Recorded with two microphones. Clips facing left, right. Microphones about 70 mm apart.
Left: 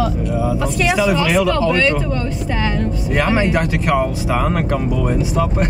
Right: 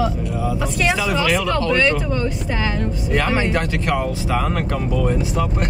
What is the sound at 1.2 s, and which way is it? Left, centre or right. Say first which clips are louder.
Speech: left 3 dB; centre.